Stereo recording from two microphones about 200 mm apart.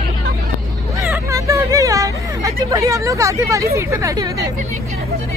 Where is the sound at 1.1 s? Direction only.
15° right (ahead or behind).